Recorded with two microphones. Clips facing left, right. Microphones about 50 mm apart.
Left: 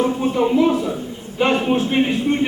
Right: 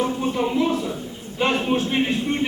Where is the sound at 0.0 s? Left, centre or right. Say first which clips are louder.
Left 4 dB; centre.